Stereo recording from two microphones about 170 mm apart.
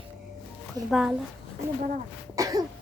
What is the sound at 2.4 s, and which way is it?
Throat clearing, 20° right (ahead or behind).